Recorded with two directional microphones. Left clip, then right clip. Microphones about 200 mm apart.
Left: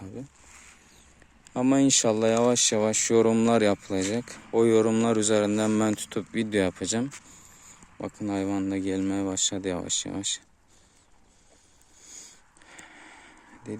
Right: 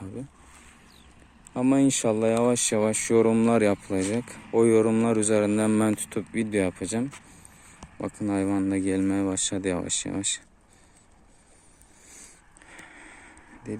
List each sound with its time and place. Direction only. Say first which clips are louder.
1.5 s speech: left 1 dB; 25° left (ahead or behind)
7.9 s speech: right 2 dB; 10° left (ahead or behind)
12.6 s a sound: right 1 dB; 15° left (ahead or behind)